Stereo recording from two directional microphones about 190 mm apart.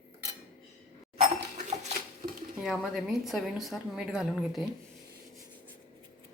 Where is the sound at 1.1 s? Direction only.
35° right (ahead or behind).